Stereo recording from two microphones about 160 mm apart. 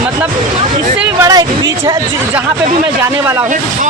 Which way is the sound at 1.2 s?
25° right (ahead or behind).